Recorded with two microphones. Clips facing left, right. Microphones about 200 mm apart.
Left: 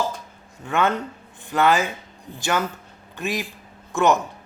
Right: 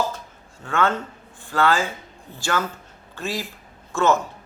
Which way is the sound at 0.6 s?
15° left (ahead or behind).